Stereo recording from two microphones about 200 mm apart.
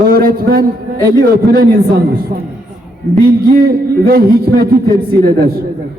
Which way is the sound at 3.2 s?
50° right (ahead or behind).